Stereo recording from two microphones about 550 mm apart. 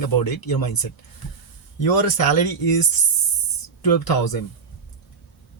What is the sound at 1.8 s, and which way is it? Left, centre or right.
Speech, left.